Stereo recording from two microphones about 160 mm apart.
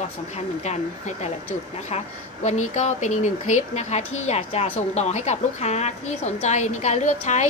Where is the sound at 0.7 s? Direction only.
45° left (ahead or behind).